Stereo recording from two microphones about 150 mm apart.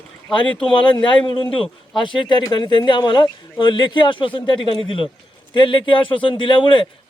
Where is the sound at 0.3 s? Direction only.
30° left (ahead or behind).